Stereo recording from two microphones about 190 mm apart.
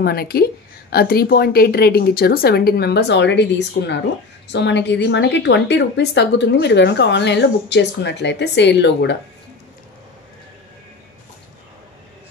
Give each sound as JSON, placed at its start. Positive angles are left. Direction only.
{"t": 0.0, "sound": "a woman's voice", "side_deg": 55}